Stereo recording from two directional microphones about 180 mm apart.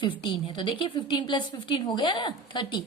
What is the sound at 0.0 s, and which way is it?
A woman's voice, 25° left (ahead or behind).